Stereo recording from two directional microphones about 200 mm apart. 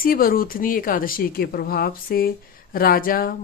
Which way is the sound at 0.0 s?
45° left (ahead or behind).